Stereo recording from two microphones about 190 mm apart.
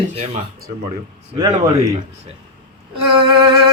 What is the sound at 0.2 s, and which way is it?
Speech, 45° right (ahead or behind).